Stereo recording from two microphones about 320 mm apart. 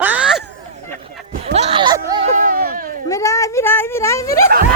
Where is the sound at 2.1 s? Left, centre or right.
Centre.